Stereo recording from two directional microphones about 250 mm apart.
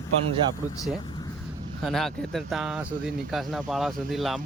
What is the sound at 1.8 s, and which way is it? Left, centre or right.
Speech, centre.